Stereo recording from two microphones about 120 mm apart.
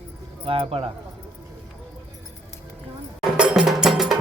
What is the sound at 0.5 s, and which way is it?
Speech, 50° right (ahead or behind).